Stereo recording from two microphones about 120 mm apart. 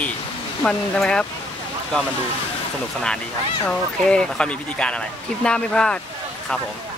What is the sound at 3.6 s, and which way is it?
Speech, 5° left (ahead or behind).